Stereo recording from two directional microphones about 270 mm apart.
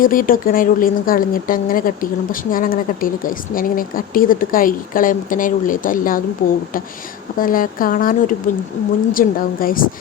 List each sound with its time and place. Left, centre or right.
0.0 s a woman's voice: left
7.3 s a woman's voice: left